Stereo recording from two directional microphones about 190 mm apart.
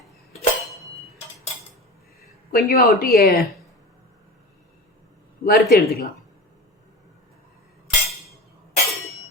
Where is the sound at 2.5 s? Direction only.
55° left (ahead or behind).